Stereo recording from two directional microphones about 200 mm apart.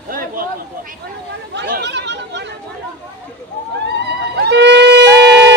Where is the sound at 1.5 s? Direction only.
60° right (ahead or behind).